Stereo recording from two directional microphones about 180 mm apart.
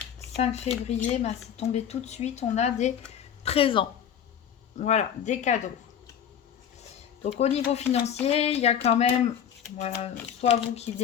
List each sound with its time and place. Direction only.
0.3 s a woman's voice: 35° left (ahead or behind)
3.2 s a sound: 35° left (ahead or behind)
4.8 s a woman's voice: 40° left (ahead or behind)
7.2 s a woman's voice: 35° left (ahead or behind)